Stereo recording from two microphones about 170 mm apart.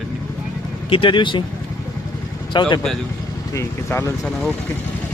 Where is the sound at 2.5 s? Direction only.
30° left (ahead or behind).